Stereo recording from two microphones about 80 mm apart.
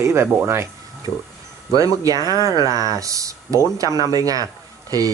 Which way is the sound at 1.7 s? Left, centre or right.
Right.